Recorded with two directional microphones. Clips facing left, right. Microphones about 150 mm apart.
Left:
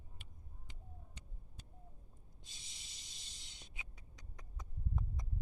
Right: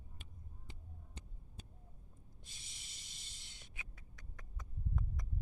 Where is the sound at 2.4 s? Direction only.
20° left (ahead or behind).